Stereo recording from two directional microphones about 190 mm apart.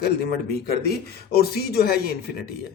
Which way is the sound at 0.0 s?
55° left (ahead or behind).